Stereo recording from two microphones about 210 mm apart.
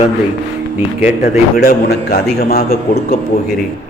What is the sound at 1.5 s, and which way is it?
A man's voice, 45° left (ahead or behind).